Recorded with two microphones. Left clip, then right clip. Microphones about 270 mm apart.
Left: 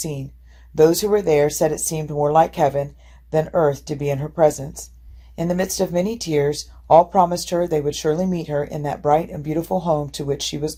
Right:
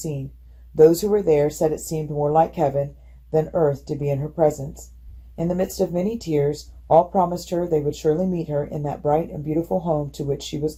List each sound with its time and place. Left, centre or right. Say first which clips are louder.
0.8 s speech: even; centre
9.6 s speech: left 5 dB; left
10.1 s speech: left 3 dB; centre